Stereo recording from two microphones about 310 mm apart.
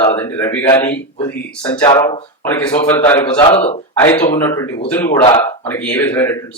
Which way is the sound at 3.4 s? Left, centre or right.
Centre.